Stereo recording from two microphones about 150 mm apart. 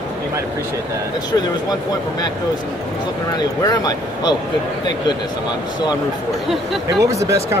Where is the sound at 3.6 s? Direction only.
25° left (ahead or behind).